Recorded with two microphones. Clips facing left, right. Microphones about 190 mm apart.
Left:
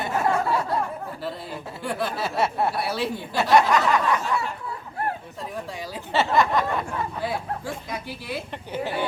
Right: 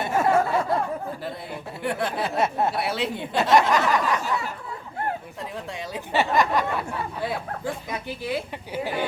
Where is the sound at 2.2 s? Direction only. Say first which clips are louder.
Even; 20° right (ahead or behind).